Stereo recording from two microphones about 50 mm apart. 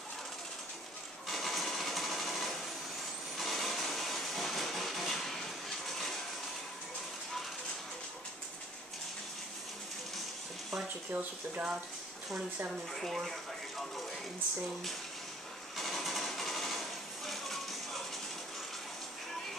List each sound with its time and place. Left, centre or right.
1.2 s sewing machine: centre
3.3 s a sound: centre
11.1 s speech: right
12.9 s speech: centre
15.7 s sewing machine: centre